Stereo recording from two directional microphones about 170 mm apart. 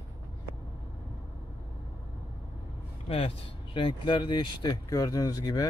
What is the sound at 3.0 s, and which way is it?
Speech, 35° left (ahead or behind).